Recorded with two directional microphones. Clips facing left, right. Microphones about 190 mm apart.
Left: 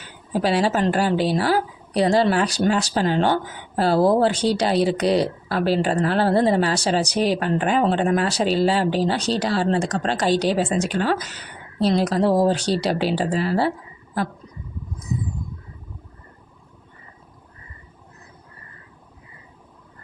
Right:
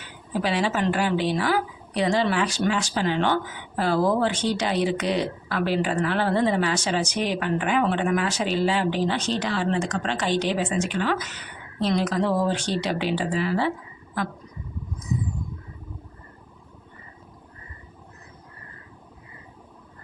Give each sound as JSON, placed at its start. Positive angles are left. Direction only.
{"t": 0.3, "sound": "a woman's voice", "side_deg": 35}